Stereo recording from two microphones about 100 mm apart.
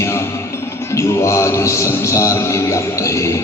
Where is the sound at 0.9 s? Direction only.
30° left (ahead or behind).